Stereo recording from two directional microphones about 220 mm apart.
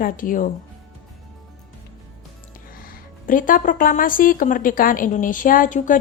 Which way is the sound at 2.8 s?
40° left (ahead or behind).